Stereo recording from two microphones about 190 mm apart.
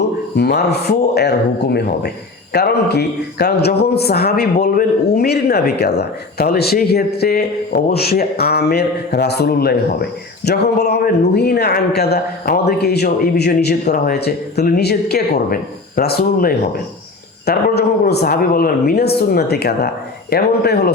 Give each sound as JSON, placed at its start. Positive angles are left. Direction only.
{"t": 0.3, "sound": "a man's voice", "side_deg": 60}